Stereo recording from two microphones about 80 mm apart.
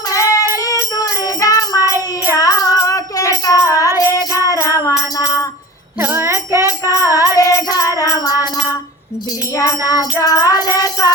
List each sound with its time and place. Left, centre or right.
0.1 s music: left
6.0 s bicycle bell: right
6.7 s music: left
9.6 s music: left